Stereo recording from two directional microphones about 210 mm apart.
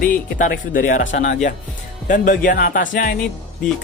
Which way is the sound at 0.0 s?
40° left (ahead or behind).